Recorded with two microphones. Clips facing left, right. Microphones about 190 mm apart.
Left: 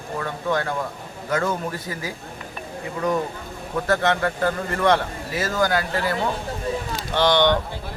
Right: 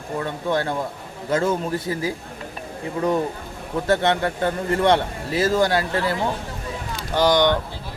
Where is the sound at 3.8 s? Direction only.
25° right (ahead or behind).